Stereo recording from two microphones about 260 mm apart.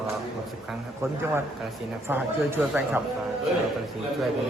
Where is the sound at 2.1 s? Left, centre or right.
Centre.